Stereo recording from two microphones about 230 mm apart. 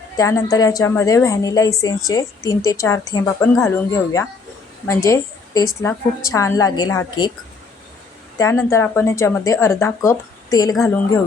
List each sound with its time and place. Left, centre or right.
0.2 s speech: centre
8.4 s speech: centre